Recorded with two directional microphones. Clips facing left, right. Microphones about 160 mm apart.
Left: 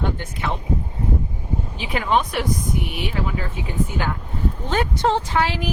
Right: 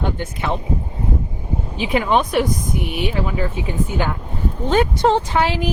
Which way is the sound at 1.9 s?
20° right (ahead or behind).